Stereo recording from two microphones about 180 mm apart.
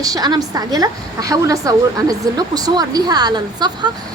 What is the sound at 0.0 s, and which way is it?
A woman's voice, 20° right (ahead or behind).